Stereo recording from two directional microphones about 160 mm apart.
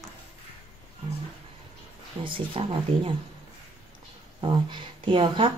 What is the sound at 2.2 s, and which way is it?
Speech, 30° right (ahead or behind).